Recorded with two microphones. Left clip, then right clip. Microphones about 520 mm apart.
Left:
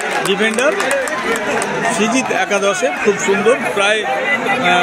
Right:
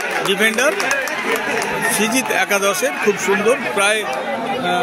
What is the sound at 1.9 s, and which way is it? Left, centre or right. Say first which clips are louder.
Speech: left 1 dB; right.